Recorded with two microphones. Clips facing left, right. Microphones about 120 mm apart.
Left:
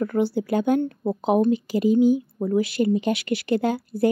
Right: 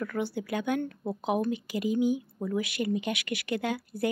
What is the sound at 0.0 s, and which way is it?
Speech, 30° left (ahead or behind).